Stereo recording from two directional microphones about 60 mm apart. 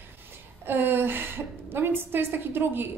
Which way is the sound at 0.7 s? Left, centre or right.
Right.